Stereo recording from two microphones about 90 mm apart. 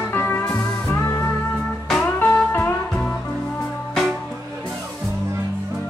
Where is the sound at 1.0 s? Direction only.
40° left (ahead or behind).